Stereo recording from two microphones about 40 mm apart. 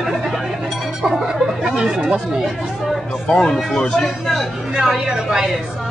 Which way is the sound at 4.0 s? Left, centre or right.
Centre.